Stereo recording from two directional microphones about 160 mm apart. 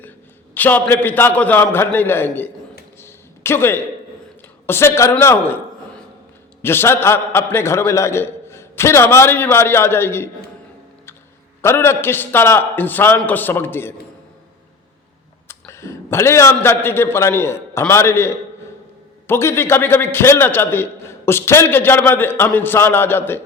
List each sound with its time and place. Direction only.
0.5 s a man's voice: 10° left (ahead or behind)
3.0 s a sound: 15° left (ahead or behind)
4.6 s a man's voice: 15° left (ahead or behind)
6.6 s a man's voice: 15° left (ahead or behind)
11.6 s a man's voice: 15° left (ahead or behind)
15.4 s a man's voice: 15° left (ahead or behind)